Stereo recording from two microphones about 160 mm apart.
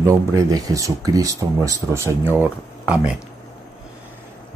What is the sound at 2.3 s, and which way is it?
Speech, 10° right (ahead or behind).